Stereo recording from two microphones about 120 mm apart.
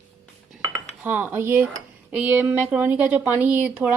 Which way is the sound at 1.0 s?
15° right (ahead or behind).